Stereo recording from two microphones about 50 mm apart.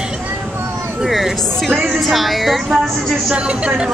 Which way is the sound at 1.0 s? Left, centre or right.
Centre.